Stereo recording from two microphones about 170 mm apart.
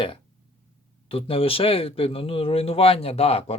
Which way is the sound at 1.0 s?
35° left (ahead or behind).